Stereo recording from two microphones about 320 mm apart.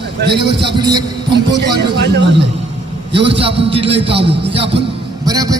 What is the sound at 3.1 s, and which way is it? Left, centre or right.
Speech, centre.